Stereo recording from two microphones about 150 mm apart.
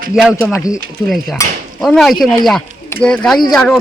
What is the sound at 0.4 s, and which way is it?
Speech, 20° left (ahead or behind).